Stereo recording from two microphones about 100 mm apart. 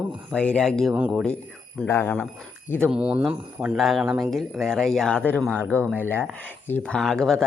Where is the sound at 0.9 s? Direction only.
15° right (ahead or behind).